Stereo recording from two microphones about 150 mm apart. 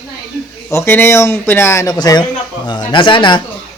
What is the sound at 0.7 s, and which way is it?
Speech, 15° left (ahead or behind).